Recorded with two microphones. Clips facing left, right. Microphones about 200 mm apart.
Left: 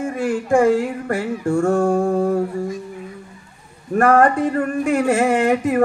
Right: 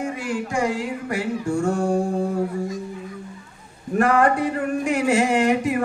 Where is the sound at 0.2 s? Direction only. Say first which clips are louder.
Left 11 dB; 55° left (ahead or behind).